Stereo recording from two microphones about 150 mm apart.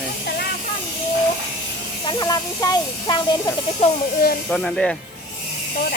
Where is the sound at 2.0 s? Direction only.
25° left (ahead or behind).